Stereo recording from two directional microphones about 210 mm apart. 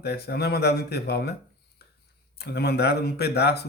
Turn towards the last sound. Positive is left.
turn(degrees=50)  # may be behind; listen again after turning